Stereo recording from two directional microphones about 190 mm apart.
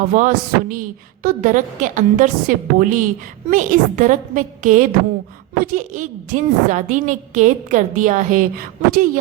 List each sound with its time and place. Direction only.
0.1 s a woman's voice: 45° right (ahead or behind)